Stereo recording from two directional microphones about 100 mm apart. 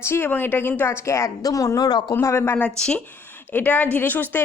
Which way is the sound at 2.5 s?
10° left (ahead or behind).